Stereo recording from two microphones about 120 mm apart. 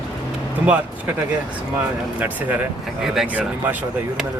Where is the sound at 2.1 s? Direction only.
15° right (ahead or behind).